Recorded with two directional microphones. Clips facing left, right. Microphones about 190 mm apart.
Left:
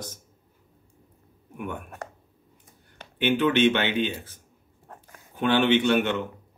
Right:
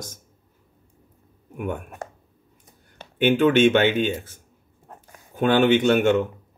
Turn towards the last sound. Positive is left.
turn(degrees=-45)  # may be behind; listen again after turning